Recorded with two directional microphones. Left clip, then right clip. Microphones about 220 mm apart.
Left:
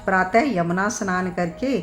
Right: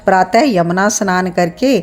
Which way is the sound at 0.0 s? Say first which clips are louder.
Right 8 dB; 35° right (ahead or behind).